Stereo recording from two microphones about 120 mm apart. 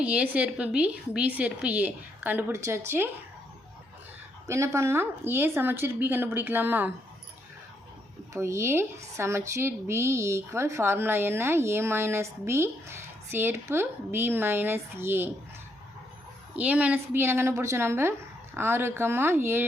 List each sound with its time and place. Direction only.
0.0 s a woman's voice: 10° right (ahead or behind)
4.4 s speech: 25° right (ahead or behind)
8.3 s speech: 25° right (ahead or behind)
16.6 s speech: 10° right (ahead or behind)